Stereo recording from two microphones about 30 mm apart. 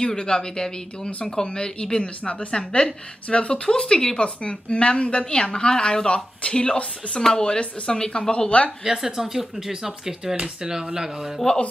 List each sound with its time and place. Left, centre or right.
0.0 s speech: left
5.4 s speech: left
8.8 s speech: centre